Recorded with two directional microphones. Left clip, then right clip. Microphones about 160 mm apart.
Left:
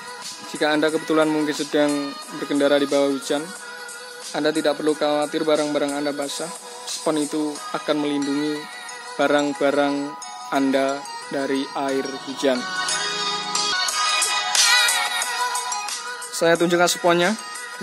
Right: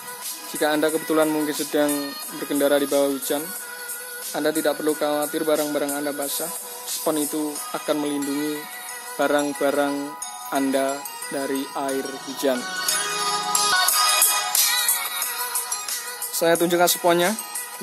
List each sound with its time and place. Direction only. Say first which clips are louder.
0.6 s a man's voice: left 1 dB; centre (ahead or behind)
12.5 s speech: left 2 dB; 25° left (ahead or behind)
12.8 s music: left 1 dB; centre (ahead or behind)
13.1 s music: right 1 dB; 20° right (ahead or behind)
14.7 s music: left 7 dB; 45° left (ahead or behind)
16.3 s a man's voice: left 1 dB; centre (ahead or behind)